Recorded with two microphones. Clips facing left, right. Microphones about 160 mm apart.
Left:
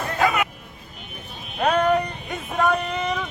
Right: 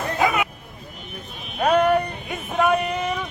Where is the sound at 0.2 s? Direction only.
15° right (ahead or behind).